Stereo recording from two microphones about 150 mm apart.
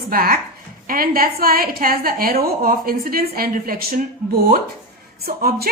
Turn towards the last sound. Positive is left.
turn(degrees=-85)